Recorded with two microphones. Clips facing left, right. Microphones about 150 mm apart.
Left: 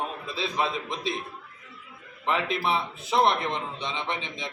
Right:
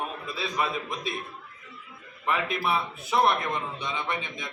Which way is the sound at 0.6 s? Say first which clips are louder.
Even; 30° left (ahead or behind).